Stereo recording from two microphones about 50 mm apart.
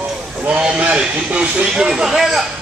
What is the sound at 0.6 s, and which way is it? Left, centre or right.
Speech, right.